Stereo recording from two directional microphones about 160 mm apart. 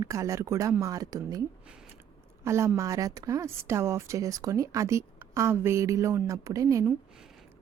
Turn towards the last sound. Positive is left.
turn(degrees=-20)  # may be behind; listen again after turning